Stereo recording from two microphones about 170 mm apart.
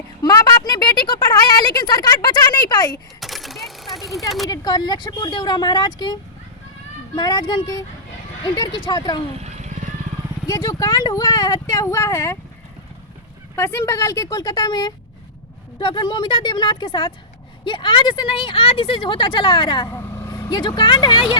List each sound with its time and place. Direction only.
0.2 s speech: 25° left (ahead or behind)
3.2 s a sound: centre (ahead or behind)
4.4 s speech: 25° left (ahead or behind)
7.2 s speech: 25° left (ahead or behind)
10.4 s speech: 20° left (ahead or behind)
13.6 s speech: 15° left (ahead or behind)
19.9 s speech: 15° left (ahead or behind); by 21.3 s 30° left (ahead or behind)